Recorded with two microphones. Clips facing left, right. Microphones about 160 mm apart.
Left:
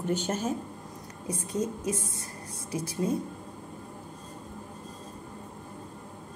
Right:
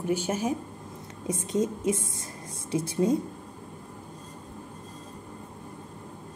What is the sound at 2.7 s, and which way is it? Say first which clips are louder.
Speech: right 5 dB; 25° right (ahead or behind).